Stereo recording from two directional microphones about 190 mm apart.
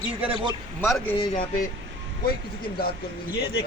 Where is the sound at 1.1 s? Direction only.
45° left (ahead or behind).